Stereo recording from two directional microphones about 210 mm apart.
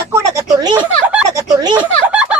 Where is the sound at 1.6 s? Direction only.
20° right (ahead or behind).